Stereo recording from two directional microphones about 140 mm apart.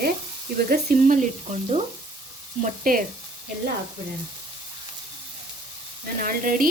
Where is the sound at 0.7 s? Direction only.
80° right.